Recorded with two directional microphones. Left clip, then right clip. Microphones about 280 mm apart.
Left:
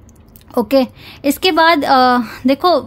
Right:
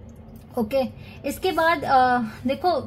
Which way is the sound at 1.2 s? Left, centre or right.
Left.